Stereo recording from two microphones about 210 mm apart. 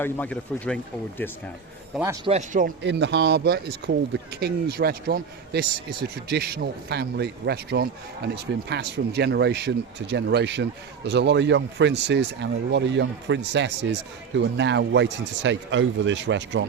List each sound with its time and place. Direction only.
0.0 s speech: 5° left (ahead or behind)
2.2 s a man's voice: 35° right (ahead or behind)
2.8 s speech: 55° right (ahead or behind)